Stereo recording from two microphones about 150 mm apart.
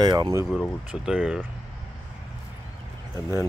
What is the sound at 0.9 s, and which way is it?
Speech, 5° right (ahead or behind).